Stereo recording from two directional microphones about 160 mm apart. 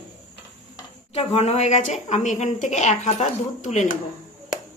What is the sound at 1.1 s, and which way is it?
A woman's voice, 40° left (ahead or behind).